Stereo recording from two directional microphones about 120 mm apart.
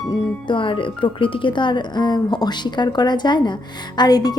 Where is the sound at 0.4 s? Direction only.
45° left (ahead or behind).